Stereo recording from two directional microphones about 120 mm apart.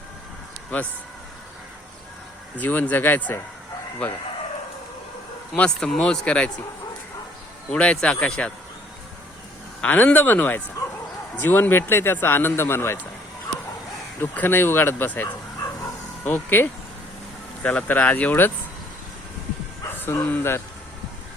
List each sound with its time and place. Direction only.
0.7 s speech: 10° left (ahead or behind)
2.6 s speech: 15° left (ahead or behind)
5.5 s speech: 5° left (ahead or behind)
7.7 s speech: 10° left (ahead or behind)
9.8 s a man's voice: 15° left (ahead or behind)
14.2 s speech: 15° left (ahead or behind)
20.0 s a man's voice: 20° left (ahead or behind)